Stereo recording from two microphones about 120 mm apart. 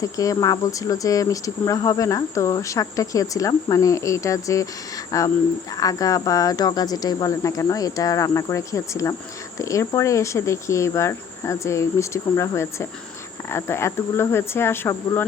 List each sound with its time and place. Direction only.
0.0 s speech: 30° left (ahead or behind)